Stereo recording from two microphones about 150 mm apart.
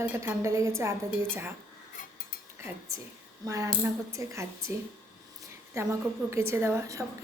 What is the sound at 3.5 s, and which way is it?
A woman's voice, 20° right (ahead or behind).